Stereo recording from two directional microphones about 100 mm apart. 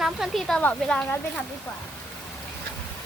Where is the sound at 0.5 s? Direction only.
10° left (ahead or behind).